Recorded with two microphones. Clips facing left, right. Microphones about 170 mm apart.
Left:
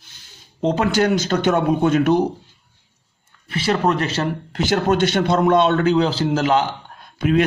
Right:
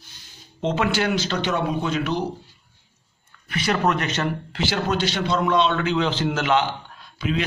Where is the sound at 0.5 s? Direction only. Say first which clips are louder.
Left 5 dB; 40° left (ahead or behind).